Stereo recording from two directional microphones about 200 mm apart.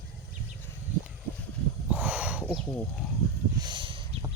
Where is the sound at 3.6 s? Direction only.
25° right (ahead or behind).